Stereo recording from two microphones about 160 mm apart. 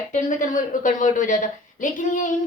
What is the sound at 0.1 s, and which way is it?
Speech, 55° left (ahead or behind).